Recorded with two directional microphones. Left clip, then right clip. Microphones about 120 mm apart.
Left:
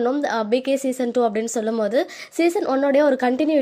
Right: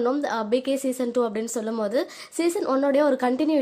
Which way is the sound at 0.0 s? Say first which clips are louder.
Left 3 dB; 15° left (ahead or behind).